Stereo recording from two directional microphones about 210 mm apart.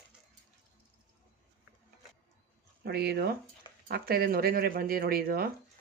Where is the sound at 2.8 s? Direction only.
50° right (ahead or behind).